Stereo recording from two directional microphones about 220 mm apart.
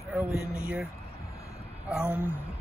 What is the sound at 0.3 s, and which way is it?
Speech, 45° left (ahead or behind).